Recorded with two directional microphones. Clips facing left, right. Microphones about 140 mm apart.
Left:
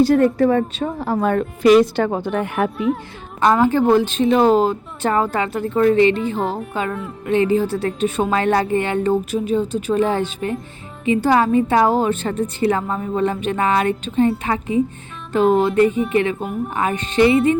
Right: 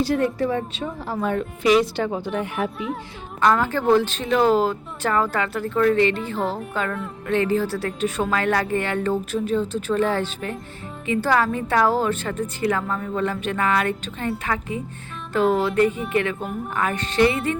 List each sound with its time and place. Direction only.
0.0 s speech: 50° left (ahead or behind)
2.7 s speech: centre (ahead or behind)
3.4 s a woman's voice: 20° left (ahead or behind)